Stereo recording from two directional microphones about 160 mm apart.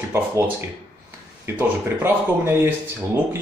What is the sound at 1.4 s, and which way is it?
Speech, 15° right (ahead or behind).